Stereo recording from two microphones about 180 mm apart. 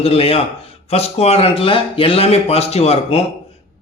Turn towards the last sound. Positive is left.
turn(degrees=35)  # may be behind; listen again after turning